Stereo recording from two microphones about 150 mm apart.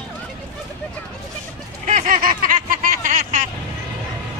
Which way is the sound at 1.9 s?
65° right (ahead or behind).